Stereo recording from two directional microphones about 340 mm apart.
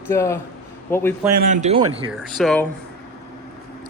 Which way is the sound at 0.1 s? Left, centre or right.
Centre.